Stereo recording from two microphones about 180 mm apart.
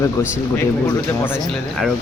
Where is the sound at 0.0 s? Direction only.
15° left (ahead or behind).